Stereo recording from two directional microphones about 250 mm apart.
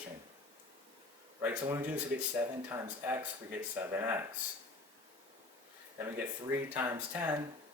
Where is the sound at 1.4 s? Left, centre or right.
Centre.